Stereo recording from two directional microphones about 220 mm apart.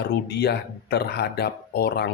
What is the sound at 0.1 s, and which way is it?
Music, 45° left (ahead or behind).